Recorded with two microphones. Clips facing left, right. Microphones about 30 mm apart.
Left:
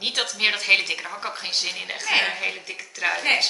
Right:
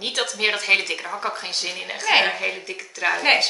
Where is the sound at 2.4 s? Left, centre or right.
Centre.